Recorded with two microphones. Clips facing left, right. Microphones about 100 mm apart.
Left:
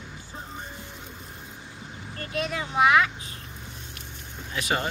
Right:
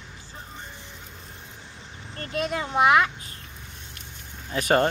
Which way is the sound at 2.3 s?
40° right (ahead or behind).